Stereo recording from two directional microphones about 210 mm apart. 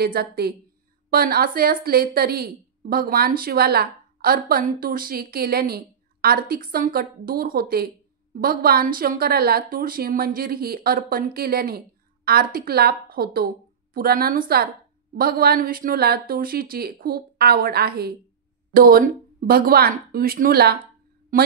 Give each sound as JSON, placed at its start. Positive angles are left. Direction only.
{"t": 0.0, "sound": "a woman's voice", "side_deg": -45}